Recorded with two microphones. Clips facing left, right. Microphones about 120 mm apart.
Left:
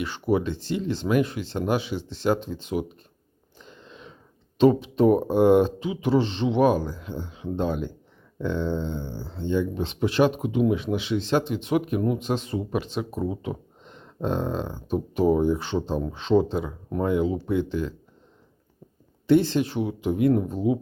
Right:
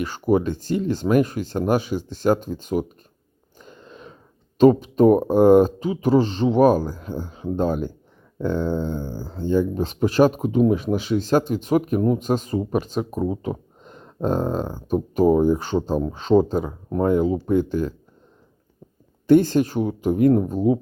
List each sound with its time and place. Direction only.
0.0 s speech: 45° right (ahead or behind)
19.3 s speech: 45° right (ahead or behind)